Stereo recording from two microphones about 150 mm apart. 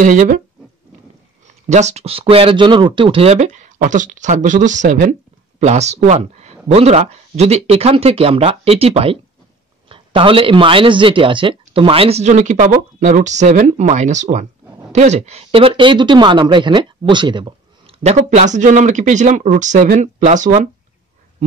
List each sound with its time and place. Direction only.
0.0 s speech: 60° right (ahead or behind)
1.7 s a man's voice: 50° right (ahead or behind)